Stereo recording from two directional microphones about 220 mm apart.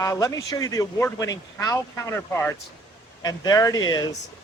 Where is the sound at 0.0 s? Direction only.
15° left (ahead or behind).